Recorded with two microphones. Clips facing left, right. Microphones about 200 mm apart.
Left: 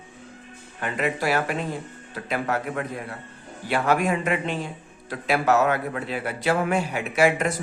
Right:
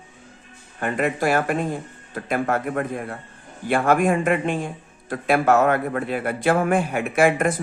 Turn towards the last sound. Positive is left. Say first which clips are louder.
# right 2 dB
turn(degrees=-50)  # may be behind; listen again after turning